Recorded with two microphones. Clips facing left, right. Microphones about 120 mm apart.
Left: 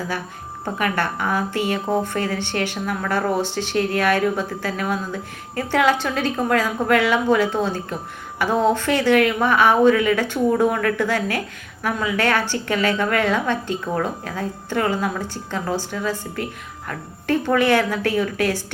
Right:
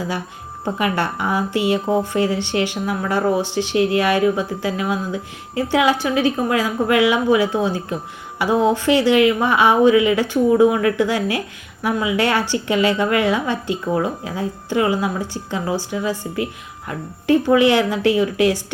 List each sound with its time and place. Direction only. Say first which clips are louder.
0.6 s speech: right 2 dB; 15° right (ahead or behind)